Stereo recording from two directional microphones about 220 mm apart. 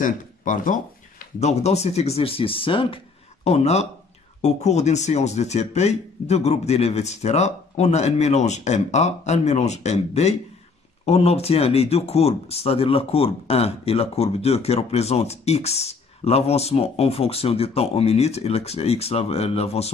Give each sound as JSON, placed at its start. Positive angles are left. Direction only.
{"t": 0.0, "sound": "speech", "side_deg": 35}